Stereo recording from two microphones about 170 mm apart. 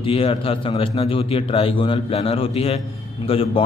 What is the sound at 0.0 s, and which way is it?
A man's voice, 35° left (ahead or behind).